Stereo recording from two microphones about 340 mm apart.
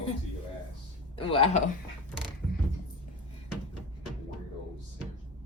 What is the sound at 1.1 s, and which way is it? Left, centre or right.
Speech, centre.